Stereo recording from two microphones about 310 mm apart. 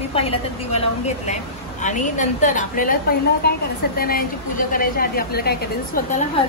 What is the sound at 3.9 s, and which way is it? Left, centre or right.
A woman's voice, left.